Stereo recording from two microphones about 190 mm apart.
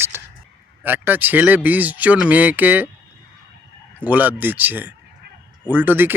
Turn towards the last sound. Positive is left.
turn(degrees=-10)  # may be behind; listen again after turning